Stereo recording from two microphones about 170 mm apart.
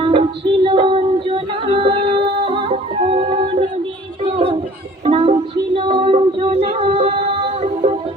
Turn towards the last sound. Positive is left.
turn(degrees=-40)  # may be behind; listen again after turning